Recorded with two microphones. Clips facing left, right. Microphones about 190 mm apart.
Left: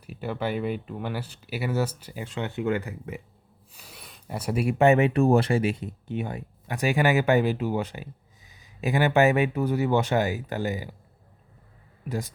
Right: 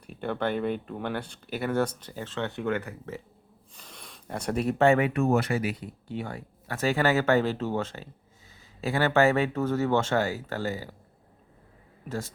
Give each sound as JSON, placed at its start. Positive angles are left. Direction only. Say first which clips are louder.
{"t": 0.0, "sound": "speech", "louder": "even", "side_deg": 5}
{"t": 12.0, "sound": "speech", "louder": "left 2 dB", "side_deg": 15}